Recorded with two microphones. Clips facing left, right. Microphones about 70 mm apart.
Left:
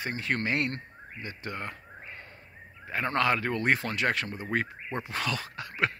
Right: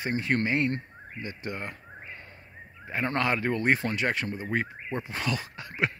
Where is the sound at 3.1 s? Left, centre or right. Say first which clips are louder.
Left 1 dB; right.